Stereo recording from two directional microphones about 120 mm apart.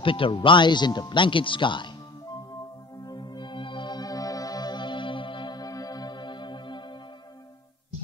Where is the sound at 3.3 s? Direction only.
45° left (ahead or behind).